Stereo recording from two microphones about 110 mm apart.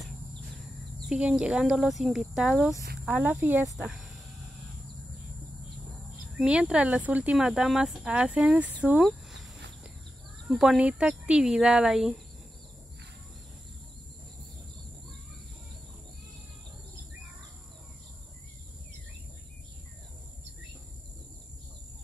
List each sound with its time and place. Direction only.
1.0 s speech: 5° right (ahead or behind)
3.1 s speech: 15° right (ahead or behind)
6.3 s speech: 10° right (ahead or behind)
10.5 s speech: 5° right (ahead or behind)